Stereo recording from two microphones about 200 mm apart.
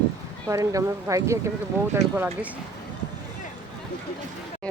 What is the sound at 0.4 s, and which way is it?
Speech, 15° right (ahead or behind).